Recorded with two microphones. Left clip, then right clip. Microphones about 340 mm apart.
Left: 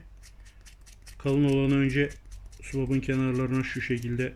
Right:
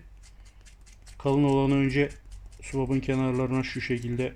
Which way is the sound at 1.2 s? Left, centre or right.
Centre.